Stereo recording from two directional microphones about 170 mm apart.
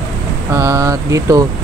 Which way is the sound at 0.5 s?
20° right (ahead or behind).